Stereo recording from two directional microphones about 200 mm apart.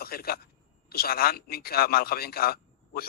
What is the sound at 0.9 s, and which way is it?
Speech, 50° left (ahead or behind).